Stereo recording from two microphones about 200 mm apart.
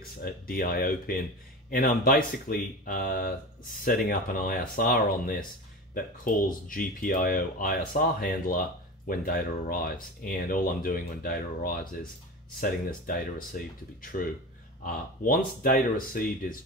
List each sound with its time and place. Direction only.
0.2 s speech: 45° left (ahead or behind)
14.9 s speech: 45° left (ahead or behind)